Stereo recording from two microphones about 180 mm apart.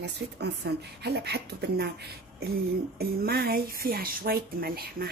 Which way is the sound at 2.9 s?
60° right (ahead or behind).